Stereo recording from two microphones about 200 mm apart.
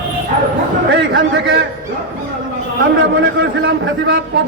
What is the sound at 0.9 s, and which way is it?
Speech, 60° right (ahead or behind).